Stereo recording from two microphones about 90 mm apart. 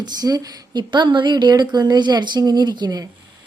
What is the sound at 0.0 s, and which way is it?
A woman's voice, 45° right (ahead or behind).